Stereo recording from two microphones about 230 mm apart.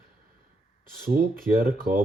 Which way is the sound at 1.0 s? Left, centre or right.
Right.